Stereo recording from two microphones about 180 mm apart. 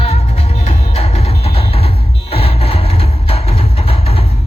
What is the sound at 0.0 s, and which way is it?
Music, 35° left (ahead or behind).